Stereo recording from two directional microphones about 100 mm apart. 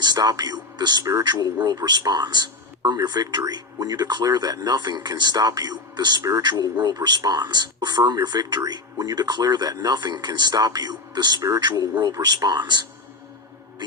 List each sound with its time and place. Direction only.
0.0 s speech: 40° right (ahead or behind)
11.4 s speech: 35° right (ahead or behind)